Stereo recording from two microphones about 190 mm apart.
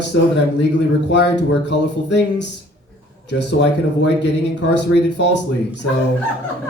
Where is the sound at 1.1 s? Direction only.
65° left (ahead or behind).